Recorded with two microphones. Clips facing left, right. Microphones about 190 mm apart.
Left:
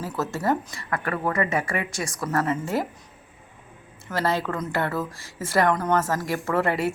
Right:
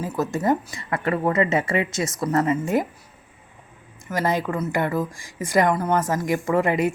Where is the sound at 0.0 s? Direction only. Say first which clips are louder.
Right 3 dB; 15° right (ahead or behind).